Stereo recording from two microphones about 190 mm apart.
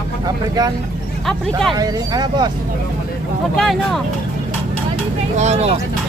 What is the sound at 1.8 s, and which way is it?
Speech, 20° right (ahead or behind).